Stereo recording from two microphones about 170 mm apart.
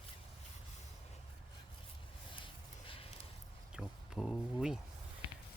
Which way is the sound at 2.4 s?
30° left (ahead or behind).